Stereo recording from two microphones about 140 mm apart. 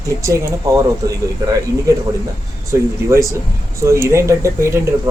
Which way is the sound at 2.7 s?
20° right (ahead or behind).